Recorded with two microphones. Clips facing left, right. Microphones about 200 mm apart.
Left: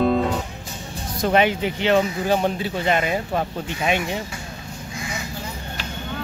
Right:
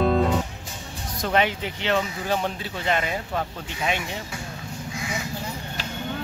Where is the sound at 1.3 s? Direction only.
10° left (ahead or behind).